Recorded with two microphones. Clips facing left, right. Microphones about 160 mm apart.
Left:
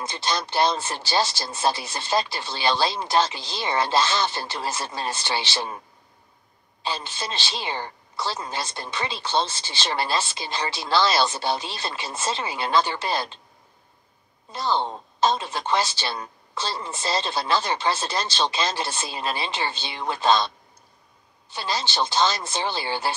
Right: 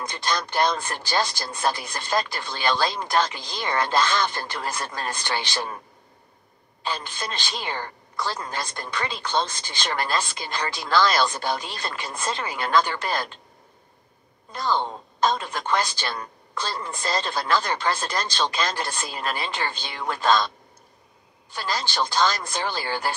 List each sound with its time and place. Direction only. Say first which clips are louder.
0.1 s a woman's voice: even; 25° left (ahead or behind)
6.8 s a woman's voice: even; 25° left (ahead or behind)
14.5 s a woman's voice: even; 25° left (ahead or behind)
21.5 s a woman's voice: even; 25° left (ahead or behind)